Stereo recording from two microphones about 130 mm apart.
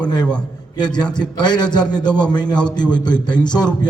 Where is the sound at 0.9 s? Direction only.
5° left (ahead or behind).